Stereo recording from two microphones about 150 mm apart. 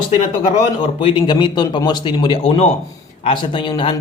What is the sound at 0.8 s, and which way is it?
Speech, 35° left (ahead or behind).